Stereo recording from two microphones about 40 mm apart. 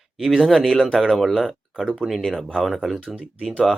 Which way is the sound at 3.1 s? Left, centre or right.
Right.